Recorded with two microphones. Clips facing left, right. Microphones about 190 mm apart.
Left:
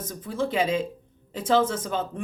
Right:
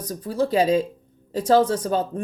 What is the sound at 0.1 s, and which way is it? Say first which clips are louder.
Speech: right 6 dB; 40° right (ahead or behind).